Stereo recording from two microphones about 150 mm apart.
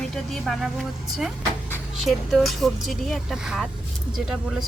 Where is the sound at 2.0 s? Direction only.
Centre (ahead or behind).